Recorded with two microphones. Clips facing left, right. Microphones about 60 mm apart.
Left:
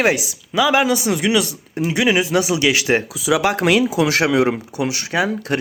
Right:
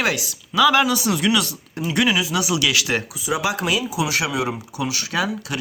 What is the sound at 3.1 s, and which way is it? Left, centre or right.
Speech, left.